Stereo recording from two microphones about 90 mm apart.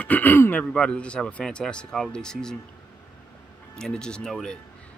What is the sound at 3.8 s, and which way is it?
Speech, 10° left (ahead or behind).